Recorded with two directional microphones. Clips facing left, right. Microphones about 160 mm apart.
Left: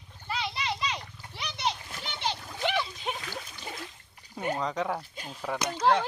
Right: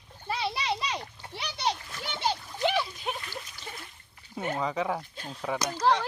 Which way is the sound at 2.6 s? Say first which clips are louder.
Right 2 dB; 10° right (ahead or behind).